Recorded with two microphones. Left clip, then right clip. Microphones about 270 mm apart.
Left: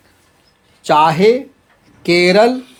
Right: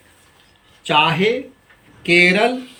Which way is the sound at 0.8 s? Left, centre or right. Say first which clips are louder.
Left 5 dB; centre.